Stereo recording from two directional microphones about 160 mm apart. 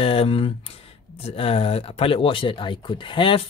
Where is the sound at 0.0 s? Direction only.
35° left (ahead or behind).